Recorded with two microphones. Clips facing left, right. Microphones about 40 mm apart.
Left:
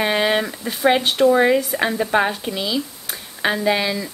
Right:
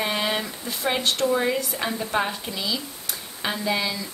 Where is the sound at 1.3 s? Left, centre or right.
Left.